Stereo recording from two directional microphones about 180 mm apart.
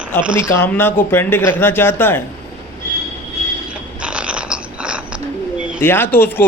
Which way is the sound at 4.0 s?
5° right (ahead or behind).